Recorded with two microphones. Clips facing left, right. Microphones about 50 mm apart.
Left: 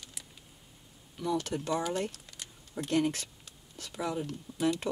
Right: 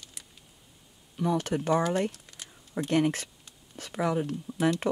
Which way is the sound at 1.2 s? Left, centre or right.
Right.